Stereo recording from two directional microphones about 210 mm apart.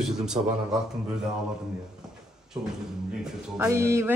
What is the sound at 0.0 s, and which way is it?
Speech, 5° right (ahead or behind).